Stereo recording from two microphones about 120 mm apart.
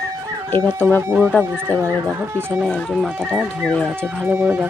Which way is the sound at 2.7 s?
5° left (ahead or behind).